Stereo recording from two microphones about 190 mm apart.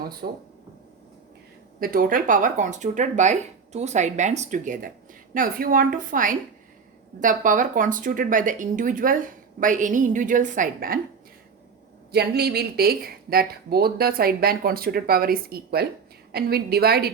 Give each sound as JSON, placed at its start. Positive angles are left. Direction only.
{"t": 0.2, "sound": "speech", "side_deg": -55}
{"t": 1.8, "sound": "speech", "side_deg": -50}
{"t": 12.1, "sound": "a woman's voice", "side_deg": -60}